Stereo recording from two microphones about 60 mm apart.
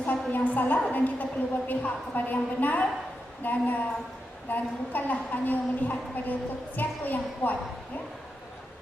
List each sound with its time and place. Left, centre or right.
0.0 s a woman's voice: left